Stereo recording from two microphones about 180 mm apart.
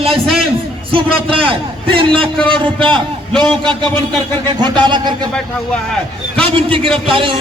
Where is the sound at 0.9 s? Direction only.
30° right (ahead or behind).